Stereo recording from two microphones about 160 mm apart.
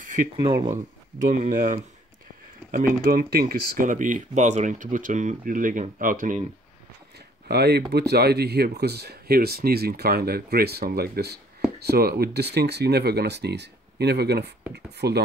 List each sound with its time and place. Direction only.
0.4 s speech: 25° right (ahead or behind)
0.7 s speech: 50° right (ahead or behind)
7.4 s speech: 90° right